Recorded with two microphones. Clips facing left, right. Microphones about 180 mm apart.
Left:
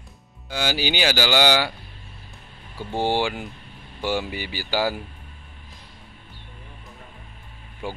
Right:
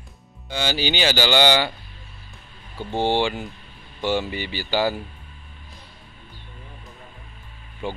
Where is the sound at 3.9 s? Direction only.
10° left (ahead or behind).